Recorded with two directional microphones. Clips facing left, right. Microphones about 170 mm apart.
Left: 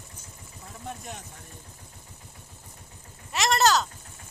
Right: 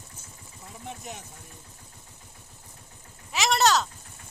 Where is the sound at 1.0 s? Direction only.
Centre (ahead or behind).